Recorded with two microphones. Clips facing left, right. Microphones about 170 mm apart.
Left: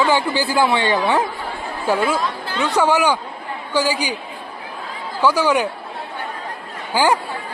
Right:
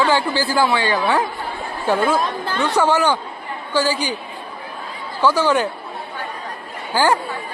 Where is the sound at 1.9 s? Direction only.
10° left (ahead or behind).